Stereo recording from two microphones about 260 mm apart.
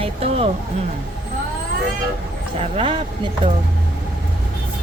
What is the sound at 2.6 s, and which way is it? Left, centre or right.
Speech, right.